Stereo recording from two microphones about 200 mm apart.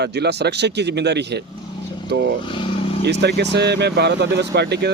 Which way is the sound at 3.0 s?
55° right (ahead or behind).